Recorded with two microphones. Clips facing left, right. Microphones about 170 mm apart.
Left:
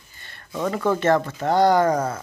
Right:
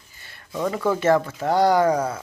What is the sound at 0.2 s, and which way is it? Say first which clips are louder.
Speech: even; 10° right (ahead or behind).